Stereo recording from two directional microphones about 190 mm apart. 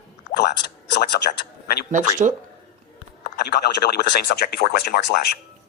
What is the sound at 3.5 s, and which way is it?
A woman's voice, 55° left (ahead or behind).